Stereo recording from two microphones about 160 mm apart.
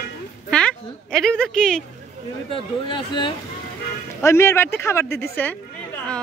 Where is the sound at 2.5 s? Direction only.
30° left (ahead or behind).